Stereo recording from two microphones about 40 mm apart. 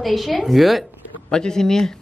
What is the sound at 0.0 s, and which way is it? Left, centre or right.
Speech, centre.